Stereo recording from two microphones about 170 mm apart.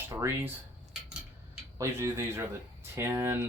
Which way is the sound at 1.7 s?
15° right (ahead or behind).